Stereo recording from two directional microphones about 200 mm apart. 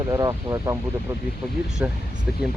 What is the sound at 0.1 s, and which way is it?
Speech, 15° right (ahead or behind).